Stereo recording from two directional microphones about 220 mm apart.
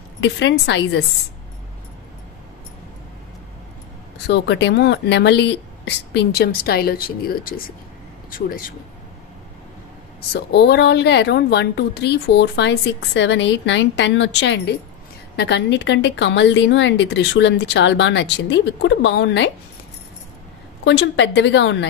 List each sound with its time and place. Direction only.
0.2 s a woman's voice: 55° left (ahead or behind)
4.3 s a woman's voice: 55° left (ahead or behind)
10.3 s a woman's voice: 50° left (ahead or behind)
20.8 s a woman's voice: 55° left (ahead or behind)